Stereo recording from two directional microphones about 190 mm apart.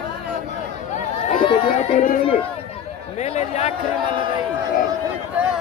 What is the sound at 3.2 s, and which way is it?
Speech, 35° left (ahead or behind).